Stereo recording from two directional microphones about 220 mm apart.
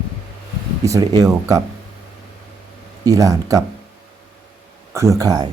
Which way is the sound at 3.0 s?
15° right (ahead or behind).